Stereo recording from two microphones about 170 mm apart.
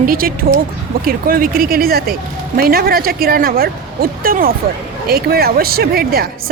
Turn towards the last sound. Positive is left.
turn(degrees=-65)  # may be behind; listen again after turning